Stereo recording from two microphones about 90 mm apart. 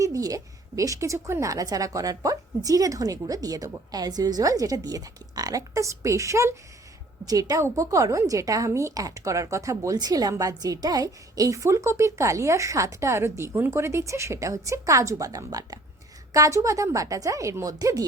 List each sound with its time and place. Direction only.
0.0 s a woman's voice: 40° right (ahead or behind)